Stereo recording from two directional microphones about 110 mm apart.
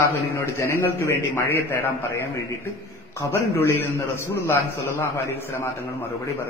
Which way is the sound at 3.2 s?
20° left (ahead or behind).